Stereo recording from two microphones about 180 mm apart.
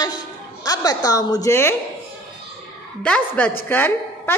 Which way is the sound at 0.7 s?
20° left (ahead or behind).